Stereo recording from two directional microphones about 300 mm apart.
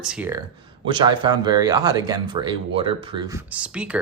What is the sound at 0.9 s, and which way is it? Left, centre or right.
Speech, centre.